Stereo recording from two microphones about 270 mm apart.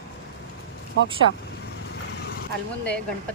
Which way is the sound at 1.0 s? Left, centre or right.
Right.